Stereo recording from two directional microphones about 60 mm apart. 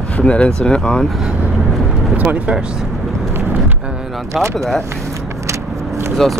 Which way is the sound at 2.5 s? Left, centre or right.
Centre.